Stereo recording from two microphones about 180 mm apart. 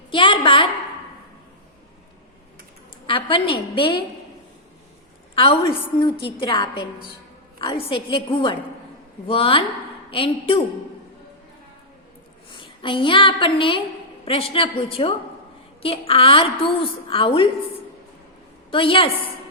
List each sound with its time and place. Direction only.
0.1 s a woman's voice: 25° left (ahead or behind)
3.1 s a woman's voice: 30° left (ahead or behind)
5.3 s a woman's voice: 30° left (ahead or behind)
12.5 s a woman's voice: 30° left (ahead or behind)
18.7 s a woman's voice: 30° left (ahead or behind)